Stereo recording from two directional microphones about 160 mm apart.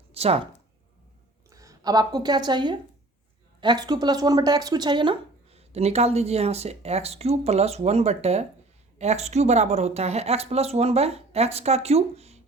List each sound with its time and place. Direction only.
0.1 s speech: 40° right (ahead or behind)
1.5 s a woman's voice: 20° right (ahead or behind); by 12.4 s 40° right (ahead or behind)